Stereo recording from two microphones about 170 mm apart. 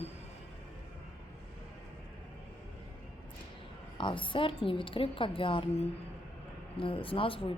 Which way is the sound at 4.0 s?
30° left (ahead or behind).